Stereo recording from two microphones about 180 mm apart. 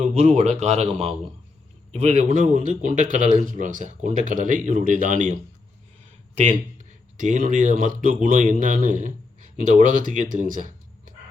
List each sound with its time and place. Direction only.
0.0 s speech: 40° right (ahead or behind)
7.2 s speech: 45° right (ahead or behind)